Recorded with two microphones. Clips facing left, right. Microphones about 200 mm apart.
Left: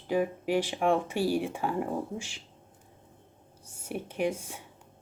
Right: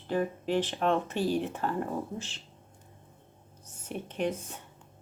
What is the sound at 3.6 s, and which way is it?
Speech, 10° left (ahead or behind).